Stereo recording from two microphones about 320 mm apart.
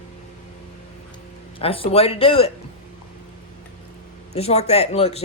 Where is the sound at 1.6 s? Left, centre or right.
Centre.